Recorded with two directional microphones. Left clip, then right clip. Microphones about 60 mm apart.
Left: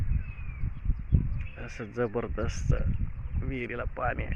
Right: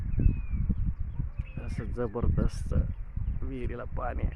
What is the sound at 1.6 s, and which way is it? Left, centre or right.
Speech, centre.